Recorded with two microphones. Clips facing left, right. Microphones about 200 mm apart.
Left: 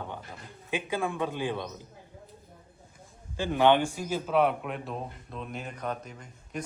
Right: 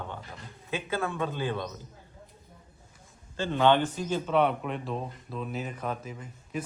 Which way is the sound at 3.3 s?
15° left (ahead or behind).